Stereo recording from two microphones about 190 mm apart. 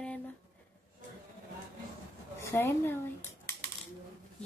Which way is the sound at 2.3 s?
15° left (ahead or behind).